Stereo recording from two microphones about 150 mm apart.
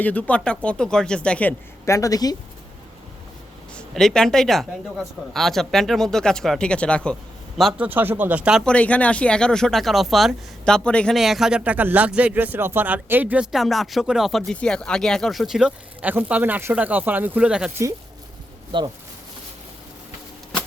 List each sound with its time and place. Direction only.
0.0 s speech: 10° left (ahead or behind)
1.8 s speech: 20° left (ahead or behind)
3.8 s speech: 5° left (ahead or behind)
7.6 s speech: 5° right (ahead or behind)
8.6 s speech: 10° left (ahead or behind); by 17.7 s 5° right (ahead or behind)
18.7 s speech: 30° right (ahead or behind)